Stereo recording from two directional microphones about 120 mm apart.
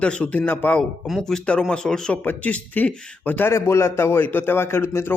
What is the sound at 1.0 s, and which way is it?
Speech, centre (ahead or behind).